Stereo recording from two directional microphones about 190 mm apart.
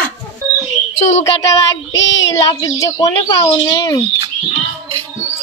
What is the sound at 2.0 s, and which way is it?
Child singing, 75° left (ahead or behind).